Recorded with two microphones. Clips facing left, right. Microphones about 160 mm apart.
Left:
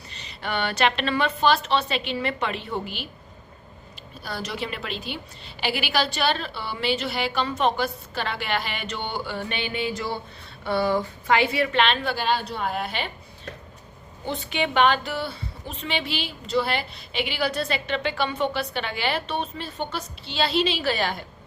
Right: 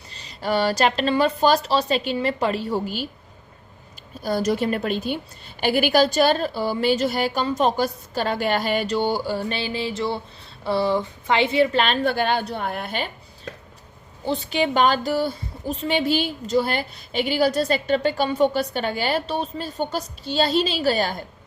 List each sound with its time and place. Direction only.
0.1 s a woman's voice: 35° right (ahead or behind)
4.2 s a woman's voice: 45° right (ahead or behind)
14.3 s a woman's voice: 35° right (ahead or behind)